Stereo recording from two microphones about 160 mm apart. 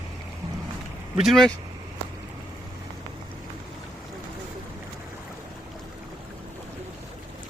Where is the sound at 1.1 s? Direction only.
Centre (ahead or behind).